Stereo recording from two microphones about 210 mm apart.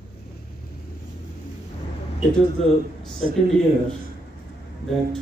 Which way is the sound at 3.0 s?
5° left (ahead or behind).